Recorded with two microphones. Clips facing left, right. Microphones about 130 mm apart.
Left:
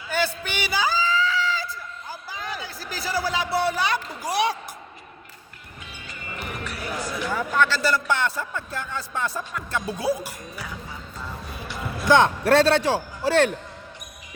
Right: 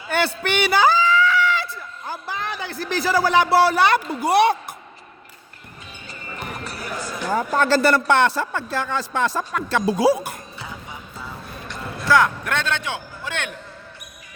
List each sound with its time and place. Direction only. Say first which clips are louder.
0.1 s a sound: right 4 dB; 65° right (ahead or behind)
2.0 s speech: right 6 dB; 70° right (ahead or behind)
6.1 s basketball bounce: right 2 dB; 35° right (ahead or behind)
7.8 s speech: right 6 dB; 60° right (ahead or behind)
11.2 s music: left 1 dB; centre (ahead or behind)
12.0 s speech: left 1 dB; 25° left (ahead or behind)
12.5 s a man's voice: left 8 dB; 35° left (ahead or behind)